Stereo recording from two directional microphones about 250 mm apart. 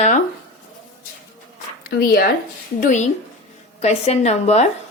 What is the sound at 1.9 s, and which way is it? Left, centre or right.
A woman's voice, left.